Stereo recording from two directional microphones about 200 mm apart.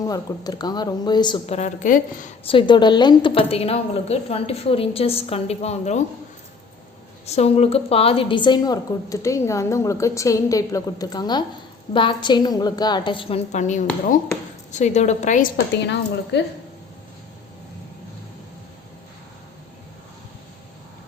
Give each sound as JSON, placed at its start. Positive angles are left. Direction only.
{"t": 0.1, "sound": "a woman's voice", "side_deg": 20}
{"t": 2.5, "sound": "a woman's voice", "side_deg": 25}
{"t": 7.3, "sound": "a woman's voice", "side_deg": 30}
{"t": 15.7, "sound": "a woman's voice", "side_deg": 60}